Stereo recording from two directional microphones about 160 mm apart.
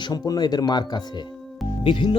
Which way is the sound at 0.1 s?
25° left (ahead or behind).